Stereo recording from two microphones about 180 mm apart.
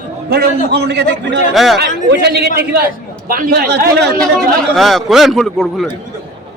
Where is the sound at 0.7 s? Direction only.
65° right (ahead or behind).